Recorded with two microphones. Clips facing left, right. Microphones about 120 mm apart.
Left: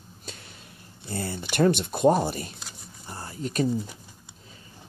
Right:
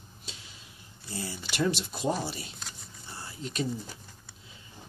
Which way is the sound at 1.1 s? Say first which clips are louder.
Left 6 dB; 55° left (ahead or behind).